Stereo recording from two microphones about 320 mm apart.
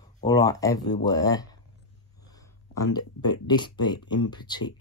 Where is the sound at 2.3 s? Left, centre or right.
Centre.